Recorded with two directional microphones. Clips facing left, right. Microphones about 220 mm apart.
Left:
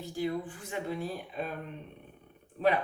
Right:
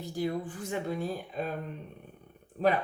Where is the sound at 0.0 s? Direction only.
40° right (ahead or behind).